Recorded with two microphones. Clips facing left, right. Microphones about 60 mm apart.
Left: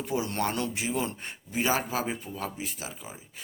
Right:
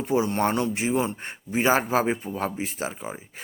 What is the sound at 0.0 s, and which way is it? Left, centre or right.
A man's voice, right.